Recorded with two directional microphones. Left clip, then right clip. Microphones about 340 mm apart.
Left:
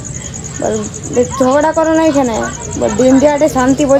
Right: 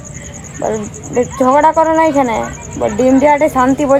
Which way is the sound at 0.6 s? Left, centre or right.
Centre.